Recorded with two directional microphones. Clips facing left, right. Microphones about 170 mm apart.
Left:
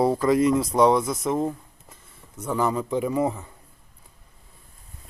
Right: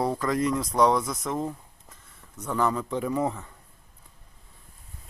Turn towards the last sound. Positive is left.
turn(degrees=10)  # may be behind; listen again after turning